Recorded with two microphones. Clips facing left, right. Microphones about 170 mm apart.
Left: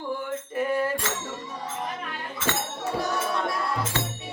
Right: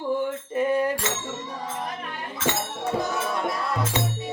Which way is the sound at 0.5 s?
20° right (ahead or behind).